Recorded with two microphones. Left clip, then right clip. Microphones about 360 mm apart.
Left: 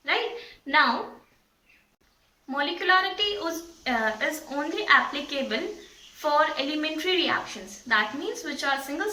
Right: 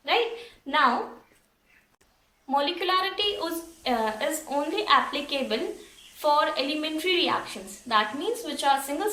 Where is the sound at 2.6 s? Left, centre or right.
Centre.